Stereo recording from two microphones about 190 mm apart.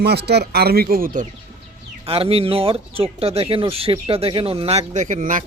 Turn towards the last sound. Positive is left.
turn(degrees=-45)  # may be behind; listen again after turning